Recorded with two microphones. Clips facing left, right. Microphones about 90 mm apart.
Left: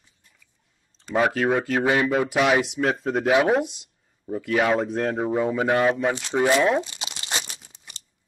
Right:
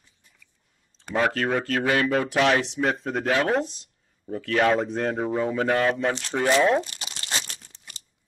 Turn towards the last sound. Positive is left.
turn(degrees=15)  # may be behind; listen again after turning